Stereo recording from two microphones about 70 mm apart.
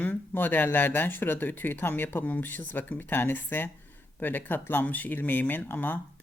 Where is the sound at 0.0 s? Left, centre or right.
Left.